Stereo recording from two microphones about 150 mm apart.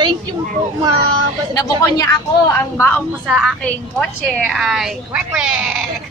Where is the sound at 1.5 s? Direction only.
25° left (ahead or behind).